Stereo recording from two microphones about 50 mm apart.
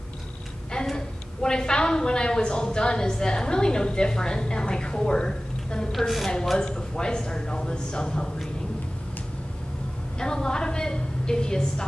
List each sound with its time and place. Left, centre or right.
0.7 s a woman's voice: centre
5.9 s a woman's voice: centre
6.6 s a woman's voice: centre
10.1 s a woman's voice: centre